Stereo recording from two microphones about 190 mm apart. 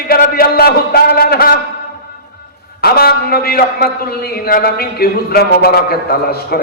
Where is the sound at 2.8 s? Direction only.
55° left (ahead or behind).